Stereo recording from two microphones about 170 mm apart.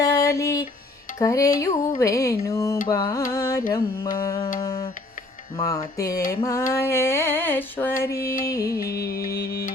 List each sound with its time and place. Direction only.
0.0 s music: 20° left (ahead or behind)
2.0 s a sound: 20° left (ahead or behind)
2.8 s music: 20° left (ahead or behind)
3.3 s carnatic music: 20° left (ahead or behind)
4.2 s music: 20° left (ahead or behind)
5.6 s music: 20° left (ahead or behind)
6.4 s a sound: 15° left (ahead or behind)
8.4 s music: 20° left (ahead or behind)
9.1 s music: 65° left (ahead or behind)